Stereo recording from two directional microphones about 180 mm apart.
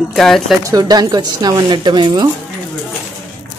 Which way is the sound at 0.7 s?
20° right (ahead or behind).